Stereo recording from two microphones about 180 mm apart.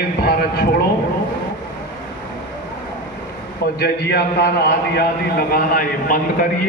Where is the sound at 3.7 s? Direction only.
60° left (ahead or behind).